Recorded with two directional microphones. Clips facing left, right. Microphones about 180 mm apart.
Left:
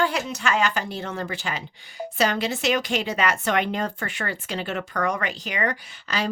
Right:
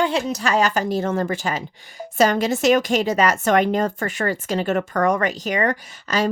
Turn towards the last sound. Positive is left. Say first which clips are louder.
# right 6 dB
turn(degrees=-45)  # may be behind; listen again after turning